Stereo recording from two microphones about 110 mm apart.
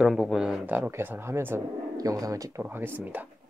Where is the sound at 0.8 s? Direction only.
20° right (ahead or behind).